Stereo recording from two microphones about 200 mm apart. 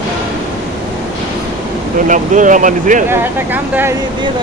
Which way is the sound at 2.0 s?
40° right (ahead or behind).